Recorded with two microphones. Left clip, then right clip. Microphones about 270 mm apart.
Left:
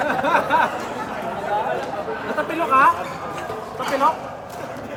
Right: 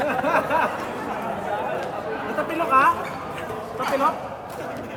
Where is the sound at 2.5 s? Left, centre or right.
Left.